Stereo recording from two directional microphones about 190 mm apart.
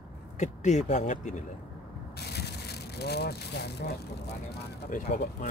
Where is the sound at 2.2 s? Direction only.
60° left (ahead or behind).